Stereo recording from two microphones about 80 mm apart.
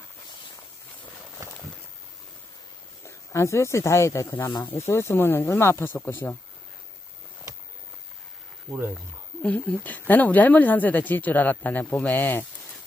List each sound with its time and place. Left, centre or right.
3.0 s speech: left
7.5 s a sound: right
8.7 s speech: right
9.4 s speech: centre